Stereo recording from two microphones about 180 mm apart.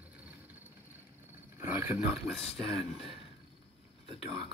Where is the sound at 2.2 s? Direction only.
Centre (ahead or behind).